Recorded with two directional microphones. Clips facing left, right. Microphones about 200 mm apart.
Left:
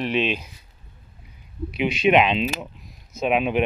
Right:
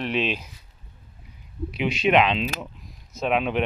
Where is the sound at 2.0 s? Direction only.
5° left (ahead or behind).